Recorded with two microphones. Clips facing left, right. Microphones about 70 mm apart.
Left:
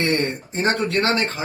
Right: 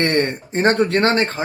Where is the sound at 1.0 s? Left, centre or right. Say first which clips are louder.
Right 4 dB; right.